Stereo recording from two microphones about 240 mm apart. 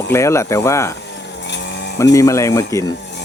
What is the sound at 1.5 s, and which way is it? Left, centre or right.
Vehicle, left.